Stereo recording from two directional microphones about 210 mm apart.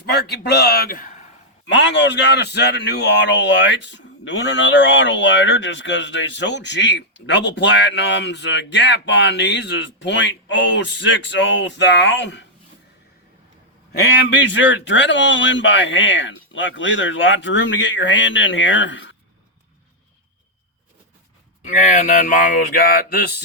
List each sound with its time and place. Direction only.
0.0 s a man's voice: 50° left (ahead or behind)
1.6 s a man's voice: 60° left (ahead or behind)
14.0 s a man's voice: 55° left (ahead or behind)
21.6 s speech: 35° left (ahead or behind)